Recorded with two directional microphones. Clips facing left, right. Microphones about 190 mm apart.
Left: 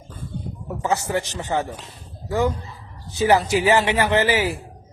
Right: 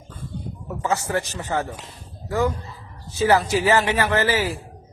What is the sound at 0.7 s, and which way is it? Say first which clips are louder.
Speech: left 1 dB; 15° left (ahead or behind).